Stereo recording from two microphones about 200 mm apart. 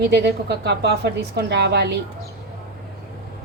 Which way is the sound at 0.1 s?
55° right (ahead or behind).